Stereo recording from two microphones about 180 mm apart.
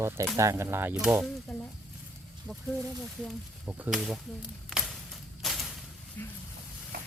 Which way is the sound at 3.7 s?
5° right (ahead or behind).